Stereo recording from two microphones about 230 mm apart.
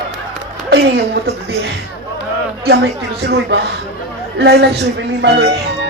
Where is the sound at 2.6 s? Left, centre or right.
Right.